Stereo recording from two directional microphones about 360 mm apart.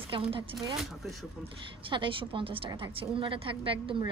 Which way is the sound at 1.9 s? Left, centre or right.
Centre.